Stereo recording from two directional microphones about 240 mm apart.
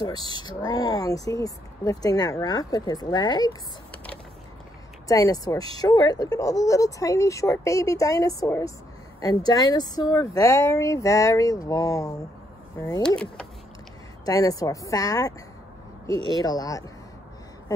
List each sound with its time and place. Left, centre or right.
0.2 s speech: right
0.5 s speech: centre
5.0 s speech: centre
14.2 s speech: centre
16.4 s speech: centre